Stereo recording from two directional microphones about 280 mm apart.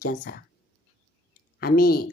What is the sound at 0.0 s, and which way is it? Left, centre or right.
Speech, left.